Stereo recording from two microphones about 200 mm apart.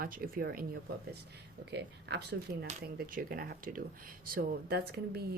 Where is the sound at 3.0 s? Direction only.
45° right (ahead or behind).